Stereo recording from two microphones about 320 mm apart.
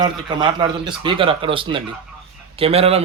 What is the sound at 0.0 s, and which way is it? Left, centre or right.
Speech, centre.